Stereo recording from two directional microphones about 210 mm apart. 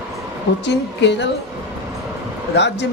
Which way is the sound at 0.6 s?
55° left (ahead or behind).